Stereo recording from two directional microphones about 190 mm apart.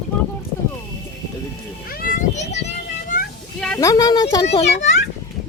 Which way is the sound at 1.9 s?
50° left (ahead or behind).